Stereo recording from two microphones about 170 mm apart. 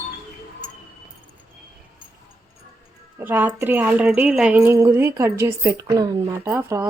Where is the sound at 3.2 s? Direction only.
10° right (ahead or behind).